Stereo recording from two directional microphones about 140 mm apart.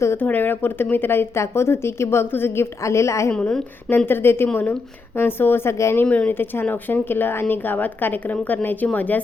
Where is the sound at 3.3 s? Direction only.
10° left (ahead or behind).